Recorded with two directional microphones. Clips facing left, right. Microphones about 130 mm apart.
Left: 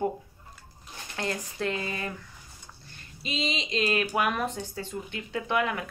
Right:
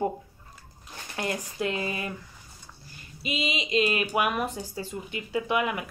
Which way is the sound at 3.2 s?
10° right (ahead or behind).